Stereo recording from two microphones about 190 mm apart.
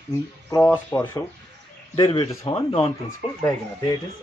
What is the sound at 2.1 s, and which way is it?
Speech, 25° left (ahead or behind).